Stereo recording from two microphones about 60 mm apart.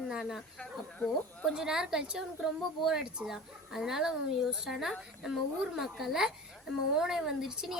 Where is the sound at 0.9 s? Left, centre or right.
Left.